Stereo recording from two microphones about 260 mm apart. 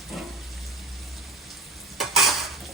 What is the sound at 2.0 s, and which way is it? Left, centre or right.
Stir, centre.